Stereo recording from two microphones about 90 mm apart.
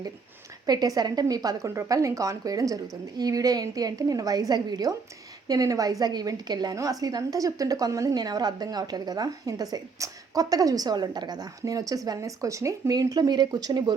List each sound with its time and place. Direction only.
0.6 s a woman's voice: 45° right (ahead or behind)
1.7 s a woman's voice: 35° right (ahead or behind)